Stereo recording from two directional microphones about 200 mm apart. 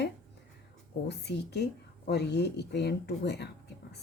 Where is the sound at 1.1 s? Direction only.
55° left (ahead or behind).